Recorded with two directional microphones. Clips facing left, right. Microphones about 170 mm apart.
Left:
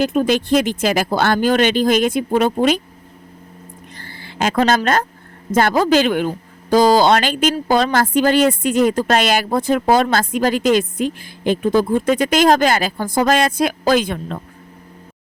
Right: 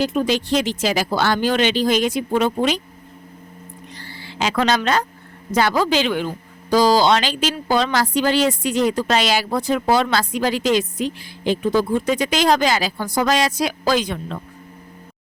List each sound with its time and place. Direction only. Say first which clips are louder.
0.0 s speech: left 3 dB; 50° left (ahead or behind)
3.9 s a sound: left 3 dB; 50° left (ahead or behind)
5.5 s speech: left 4 dB; 50° left (ahead or behind)